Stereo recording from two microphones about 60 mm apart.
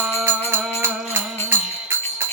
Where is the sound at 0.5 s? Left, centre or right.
Right.